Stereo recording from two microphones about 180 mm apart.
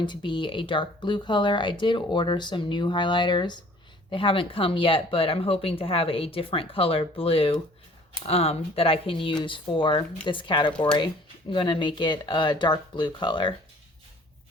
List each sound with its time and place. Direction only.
0.0 s speech: 25° left (ahead or behind)